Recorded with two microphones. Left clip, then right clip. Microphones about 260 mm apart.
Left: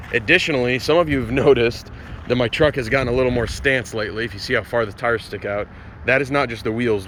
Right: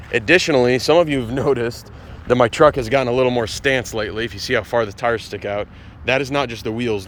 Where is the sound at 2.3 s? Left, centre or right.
Centre.